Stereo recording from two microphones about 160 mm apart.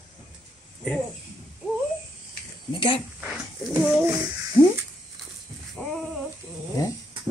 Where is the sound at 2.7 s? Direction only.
35° left (ahead or behind).